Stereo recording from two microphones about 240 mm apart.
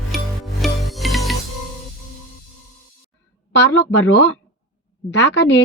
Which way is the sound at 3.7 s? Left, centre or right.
Left.